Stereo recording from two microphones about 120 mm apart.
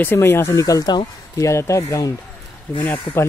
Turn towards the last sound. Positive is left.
turn(degrees=15)  # may be behind; listen again after turning